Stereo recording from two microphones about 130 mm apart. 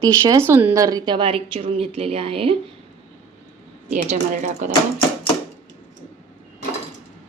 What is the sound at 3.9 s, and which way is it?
Speech, 70° right (ahead or behind).